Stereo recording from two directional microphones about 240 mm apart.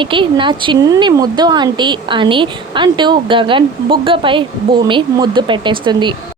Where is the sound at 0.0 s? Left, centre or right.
Right.